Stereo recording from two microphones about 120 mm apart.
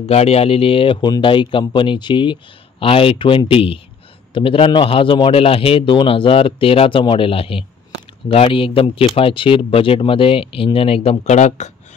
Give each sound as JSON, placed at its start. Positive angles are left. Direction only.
{"t": 0.0, "sound": "a man's voice", "side_deg": 60}